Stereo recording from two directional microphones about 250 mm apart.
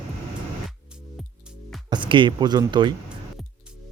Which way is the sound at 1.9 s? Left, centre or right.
Centre.